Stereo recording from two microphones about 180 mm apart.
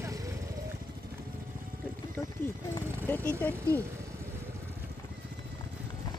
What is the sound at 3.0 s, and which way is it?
Vehicle, 10° left (ahead or behind).